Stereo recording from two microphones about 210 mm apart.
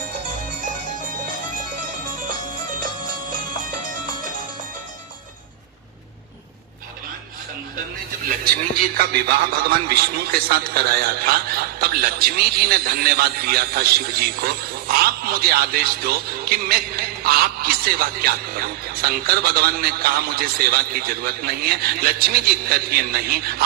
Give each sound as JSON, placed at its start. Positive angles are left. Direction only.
{"t": 0.6, "sound": "music", "side_deg": -40}
{"t": 8.2, "sound": "a man's voice", "side_deg": -45}